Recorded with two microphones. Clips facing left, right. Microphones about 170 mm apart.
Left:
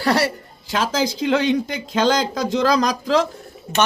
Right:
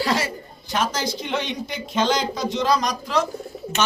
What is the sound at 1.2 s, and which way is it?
Speech, 90° left.